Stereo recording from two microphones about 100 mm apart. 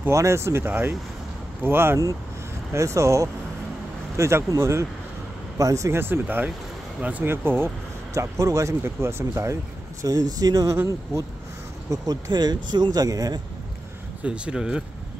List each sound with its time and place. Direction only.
0.0 s speech: 30° right (ahead or behind)
11.9 s speech: 40° right (ahead or behind)
14.2 s speech: 10° right (ahead or behind)